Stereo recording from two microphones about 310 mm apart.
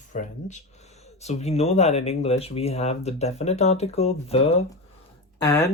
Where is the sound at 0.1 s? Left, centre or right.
Left.